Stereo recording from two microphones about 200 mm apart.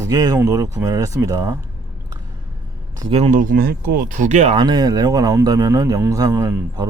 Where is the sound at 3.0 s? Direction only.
30° right (ahead or behind).